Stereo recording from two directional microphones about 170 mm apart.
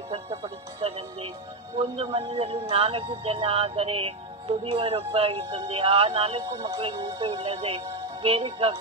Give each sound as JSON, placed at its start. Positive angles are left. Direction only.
{"t": 0.4, "sound": "music", "side_deg": -35}
{"t": 1.8, "sound": "speech", "side_deg": -35}
{"t": 6.5, "sound": "speech", "side_deg": -20}
{"t": 6.8, "sound": "speech", "side_deg": -35}